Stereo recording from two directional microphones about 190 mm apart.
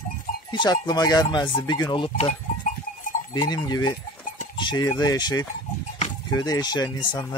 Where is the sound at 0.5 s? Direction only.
20° left (ahead or behind).